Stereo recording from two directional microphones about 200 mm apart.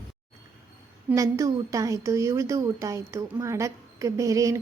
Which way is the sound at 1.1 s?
15° right (ahead or behind).